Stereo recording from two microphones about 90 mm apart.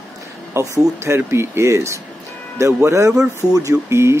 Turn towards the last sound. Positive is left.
turn(degrees=-30)  # may be behind; listen again after turning